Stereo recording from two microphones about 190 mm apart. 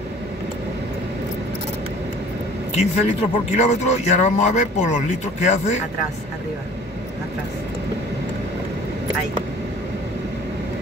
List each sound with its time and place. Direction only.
2.7 s a man's voice: 35° left (ahead or behind)